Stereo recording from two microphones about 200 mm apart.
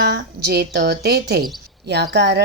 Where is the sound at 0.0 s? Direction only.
50° right (ahead or behind).